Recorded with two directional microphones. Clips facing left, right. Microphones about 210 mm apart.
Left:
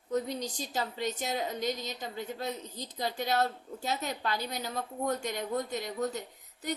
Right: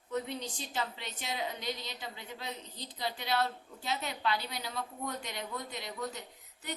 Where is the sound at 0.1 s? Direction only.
40° left (ahead or behind).